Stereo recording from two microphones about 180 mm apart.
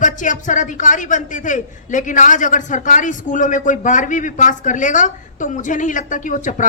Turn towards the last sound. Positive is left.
turn(degrees=45)  # may be behind; listen again after turning